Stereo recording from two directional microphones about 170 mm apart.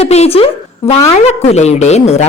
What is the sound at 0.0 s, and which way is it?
Speech, 35° left (ahead or behind).